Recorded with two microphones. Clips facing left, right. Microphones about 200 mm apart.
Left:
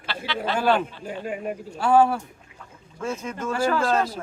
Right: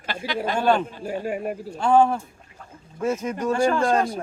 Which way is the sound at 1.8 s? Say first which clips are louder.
Even; 5° left (ahead or behind).